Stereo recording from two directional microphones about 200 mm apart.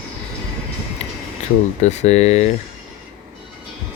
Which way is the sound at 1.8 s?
35° left (ahead or behind).